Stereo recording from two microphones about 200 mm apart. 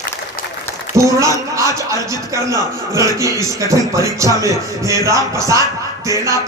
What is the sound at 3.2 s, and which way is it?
Music, 15° right (ahead or behind).